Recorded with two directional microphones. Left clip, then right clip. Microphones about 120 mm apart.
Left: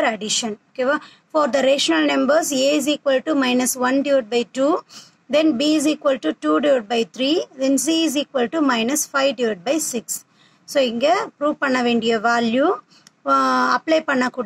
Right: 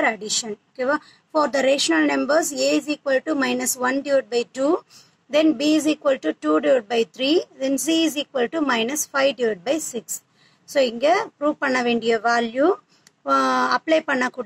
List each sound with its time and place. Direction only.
0.0 s speech: 35° left (ahead or behind)